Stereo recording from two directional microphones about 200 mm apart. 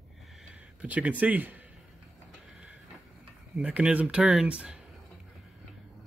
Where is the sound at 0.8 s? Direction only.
5° right (ahead or behind).